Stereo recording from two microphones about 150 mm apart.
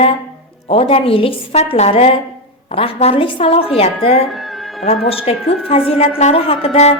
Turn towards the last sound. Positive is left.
turn(degrees=40)  # may be behind; listen again after turning